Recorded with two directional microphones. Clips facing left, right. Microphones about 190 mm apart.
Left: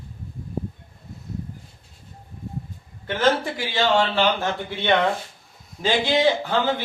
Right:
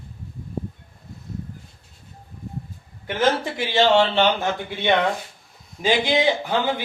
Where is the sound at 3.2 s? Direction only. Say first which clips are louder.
Even; 25° right (ahead or behind).